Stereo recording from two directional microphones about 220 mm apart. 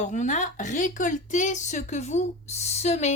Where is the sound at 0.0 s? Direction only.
35° left (ahead or behind).